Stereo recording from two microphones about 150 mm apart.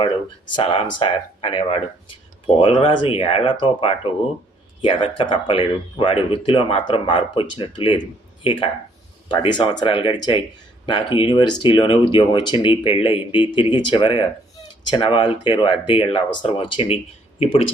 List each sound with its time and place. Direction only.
0.5 s speech: 40° left (ahead or behind)